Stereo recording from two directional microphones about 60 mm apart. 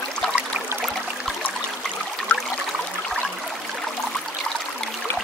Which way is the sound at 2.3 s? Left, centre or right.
Left.